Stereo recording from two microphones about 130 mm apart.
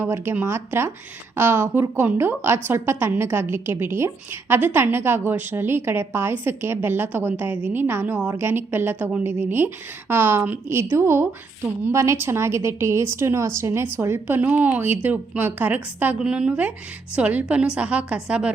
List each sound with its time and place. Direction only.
0.0 s a woman's voice: 20° right (ahead or behind)